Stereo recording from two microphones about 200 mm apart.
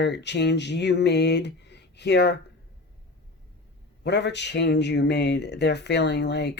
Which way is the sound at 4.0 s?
60° left (ahead or behind).